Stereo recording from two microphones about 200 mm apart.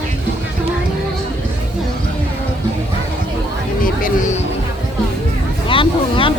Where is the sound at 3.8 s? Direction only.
40° left (ahead or behind).